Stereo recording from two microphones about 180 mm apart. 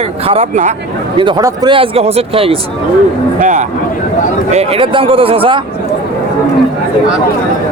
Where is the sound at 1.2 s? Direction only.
25° right (ahead or behind).